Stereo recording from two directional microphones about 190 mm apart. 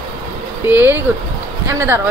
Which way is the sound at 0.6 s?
10° right (ahead or behind).